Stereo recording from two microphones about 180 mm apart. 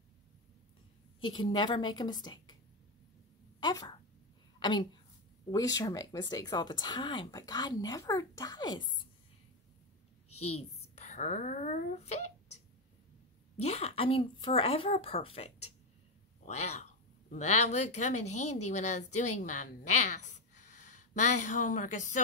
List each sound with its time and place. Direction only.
1.2 s speech: 25° left (ahead or behind)
3.6 s a woman's voice: 25° left (ahead or behind)
10.4 s a child's voice: 35° left (ahead or behind)
13.6 s speech: 35° left (ahead or behind)